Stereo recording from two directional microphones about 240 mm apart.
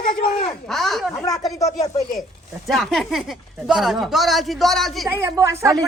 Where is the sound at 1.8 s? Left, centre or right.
Centre.